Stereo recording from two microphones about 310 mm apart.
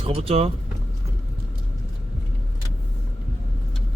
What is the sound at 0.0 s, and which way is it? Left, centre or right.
Speech, centre.